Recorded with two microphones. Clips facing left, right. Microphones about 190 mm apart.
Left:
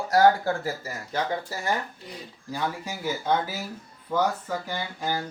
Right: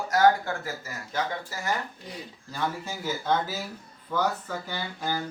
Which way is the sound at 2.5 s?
10° left (ahead or behind).